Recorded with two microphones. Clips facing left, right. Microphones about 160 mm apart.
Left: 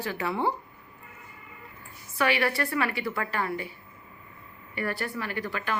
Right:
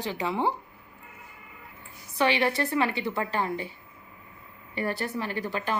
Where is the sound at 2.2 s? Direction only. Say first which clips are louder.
Right 1 dB; 25° right (ahead or behind).